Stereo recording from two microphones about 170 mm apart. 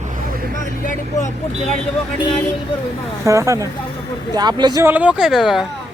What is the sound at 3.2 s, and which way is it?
Speech, 20° right (ahead or behind).